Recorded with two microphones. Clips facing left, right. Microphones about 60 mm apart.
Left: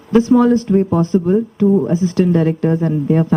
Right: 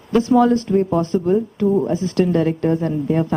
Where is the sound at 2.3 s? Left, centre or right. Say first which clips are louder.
Left 3 dB; left.